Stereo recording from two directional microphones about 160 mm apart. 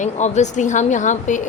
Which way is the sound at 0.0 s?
45° left (ahead or behind).